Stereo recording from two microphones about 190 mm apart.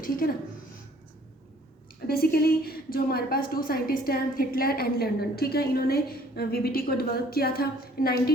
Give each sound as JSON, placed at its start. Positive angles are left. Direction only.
{"t": 0.0, "sound": "a woman's voice", "side_deg": 50}
{"t": 2.0, "sound": "a woman's voice", "side_deg": 55}